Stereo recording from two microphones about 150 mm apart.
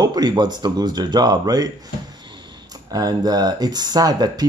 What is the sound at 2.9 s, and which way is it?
Speech, 25° right (ahead or behind).